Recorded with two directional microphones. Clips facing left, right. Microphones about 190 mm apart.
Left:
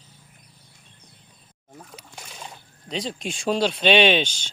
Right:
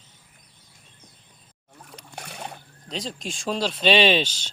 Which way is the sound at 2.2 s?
65° right (ahead or behind).